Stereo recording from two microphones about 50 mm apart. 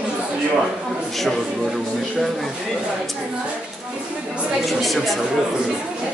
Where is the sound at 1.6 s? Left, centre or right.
Centre.